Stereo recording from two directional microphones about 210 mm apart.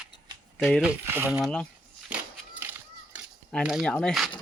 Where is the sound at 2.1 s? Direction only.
5° right (ahead or behind).